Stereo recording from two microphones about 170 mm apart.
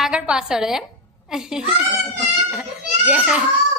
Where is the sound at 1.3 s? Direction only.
5° right (ahead or behind).